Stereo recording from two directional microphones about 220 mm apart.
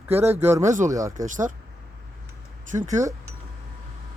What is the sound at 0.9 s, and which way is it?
Speech, 15° right (ahead or behind).